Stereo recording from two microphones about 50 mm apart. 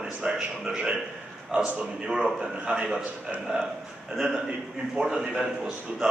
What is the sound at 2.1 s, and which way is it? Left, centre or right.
Speech, centre.